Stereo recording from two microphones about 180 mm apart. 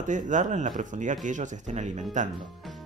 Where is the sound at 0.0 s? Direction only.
45° right (ahead or behind).